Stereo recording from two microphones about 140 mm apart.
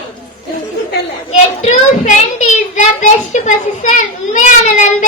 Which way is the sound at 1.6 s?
55° left (ahead or behind).